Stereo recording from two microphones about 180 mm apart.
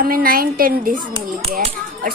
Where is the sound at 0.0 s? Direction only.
55° right (ahead or behind).